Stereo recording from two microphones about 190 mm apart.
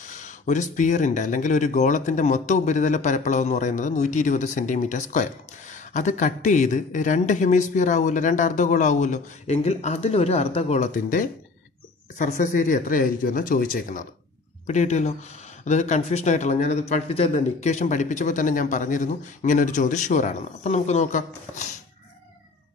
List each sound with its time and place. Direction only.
0.0 s speech: 40° left (ahead or behind)